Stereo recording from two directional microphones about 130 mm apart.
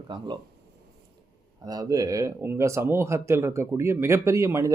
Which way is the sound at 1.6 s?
30° right (ahead or behind).